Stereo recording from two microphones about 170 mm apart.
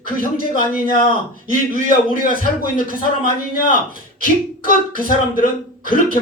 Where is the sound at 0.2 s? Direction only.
55° left (ahead or behind).